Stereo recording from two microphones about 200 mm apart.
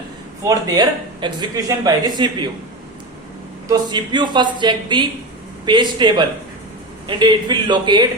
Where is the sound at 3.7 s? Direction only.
20° right (ahead or behind).